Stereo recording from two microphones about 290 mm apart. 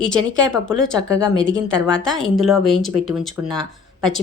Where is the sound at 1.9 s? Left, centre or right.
Centre.